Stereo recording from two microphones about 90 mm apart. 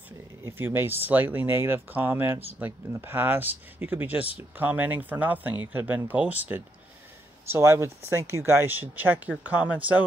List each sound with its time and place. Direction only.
0.4 s speech: 25° right (ahead or behind)
7.5 s speech: 30° right (ahead or behind)